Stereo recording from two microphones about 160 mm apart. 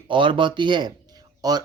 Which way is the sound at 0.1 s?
30° right (ahead or behind).